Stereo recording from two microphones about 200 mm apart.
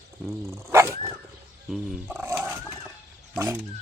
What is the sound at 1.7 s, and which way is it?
Wild animals, 5° right (ahead or behind).